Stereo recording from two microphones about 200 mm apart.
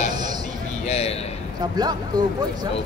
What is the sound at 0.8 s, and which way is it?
Speech, 30° left (ahead or behind).